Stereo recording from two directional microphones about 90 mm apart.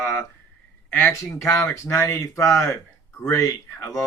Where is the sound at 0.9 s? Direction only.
25° left (ahead or behind).